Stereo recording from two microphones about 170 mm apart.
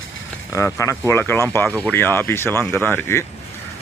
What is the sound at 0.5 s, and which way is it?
Speech, 20° left (ahead or behind).